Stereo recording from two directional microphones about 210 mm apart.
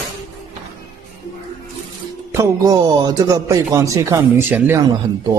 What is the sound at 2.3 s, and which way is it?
A man's voice, 15° right (ahead or behind).